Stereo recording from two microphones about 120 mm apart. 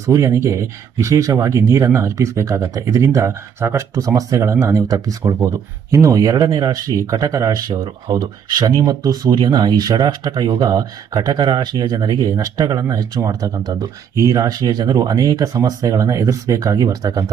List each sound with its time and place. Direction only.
0.0 s speech: 25° right (ahead or behind)